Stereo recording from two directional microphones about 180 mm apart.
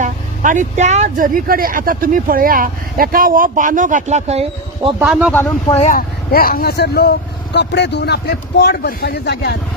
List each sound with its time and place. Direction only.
0.0 s speech: 45° right (ahead or behind)
5.3 s speech: 10° left (ahead or behind)
5.8 s speech: 50° left (ahead or behind); by 9.6 s 65° left (ahead or behind)